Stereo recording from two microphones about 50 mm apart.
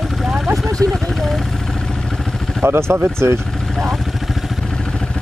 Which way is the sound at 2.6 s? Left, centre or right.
Right.